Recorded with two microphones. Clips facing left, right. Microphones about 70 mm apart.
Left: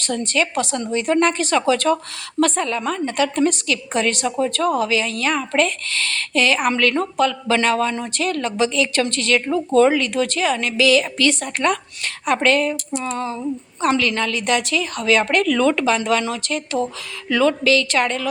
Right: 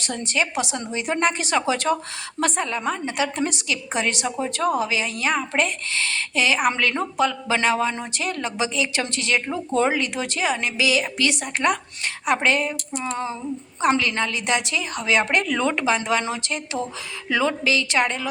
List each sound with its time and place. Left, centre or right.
0.0 s a woman's voice: centre